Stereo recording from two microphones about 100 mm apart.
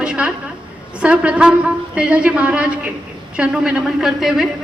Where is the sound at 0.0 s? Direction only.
10° right (ahead or behind).